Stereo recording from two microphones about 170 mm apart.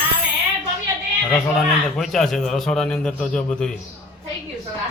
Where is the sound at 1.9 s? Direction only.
Centre (ahead or behind).